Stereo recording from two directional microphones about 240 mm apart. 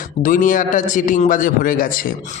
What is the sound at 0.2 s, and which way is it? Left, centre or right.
A man's voice, left.